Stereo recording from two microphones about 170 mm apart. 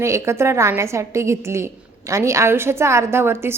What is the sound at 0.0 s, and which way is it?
A woman's voice, 15° right (ahead or behind).